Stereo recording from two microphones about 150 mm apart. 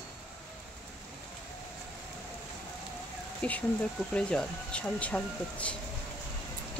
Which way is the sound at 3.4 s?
5° left (ahead or behind).